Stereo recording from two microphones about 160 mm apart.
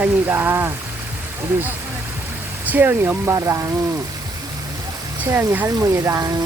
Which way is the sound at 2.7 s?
10° right (ahead or behind).